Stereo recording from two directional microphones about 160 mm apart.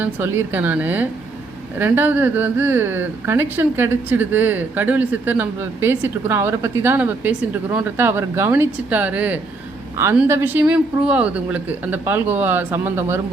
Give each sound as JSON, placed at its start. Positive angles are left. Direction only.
{"t": 0.0, "sound": "speech", "side_deg": -15}